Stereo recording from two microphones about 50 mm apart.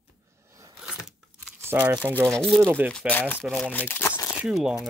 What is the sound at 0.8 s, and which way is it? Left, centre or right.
Biting, centre.